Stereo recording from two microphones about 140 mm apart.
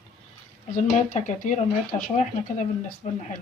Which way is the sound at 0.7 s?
65° left (ahead or behind).